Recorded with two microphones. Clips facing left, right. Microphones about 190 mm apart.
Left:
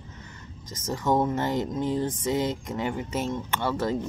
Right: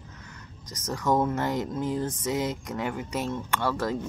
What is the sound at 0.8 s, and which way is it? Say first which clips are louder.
Speech: left 1 dB; 25° left (ahead or behind).